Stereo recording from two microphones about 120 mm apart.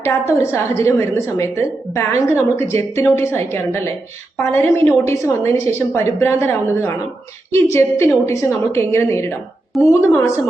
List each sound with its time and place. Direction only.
0.0 s a woman's voice: 20° left (ahead or behind)